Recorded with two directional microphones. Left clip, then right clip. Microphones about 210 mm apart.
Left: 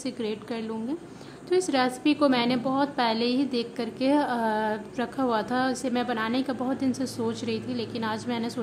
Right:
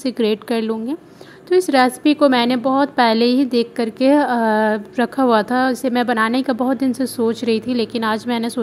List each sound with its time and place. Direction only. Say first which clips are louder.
0.0 s a woman's voice: right 13 dB; 35° right (ahead or behind)